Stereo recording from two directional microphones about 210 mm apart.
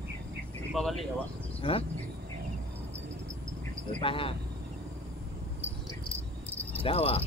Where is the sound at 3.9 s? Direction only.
25° left (ahead or behind).